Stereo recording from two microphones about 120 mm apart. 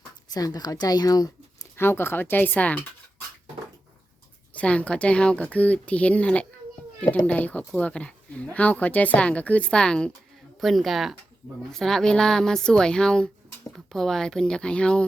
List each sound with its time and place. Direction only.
0.3 s speech: 35° left (ahead or behind)
1.7 s speech: 20° left (ahead or behind)
4.5 s speech: 10° left (ahead or behind)